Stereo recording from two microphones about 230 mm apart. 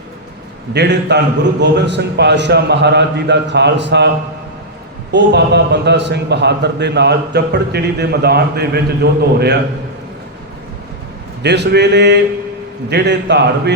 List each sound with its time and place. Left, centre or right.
0.7 s a man's voice: right
5.1 s a man's voice: right
11.4 s a man's voice: right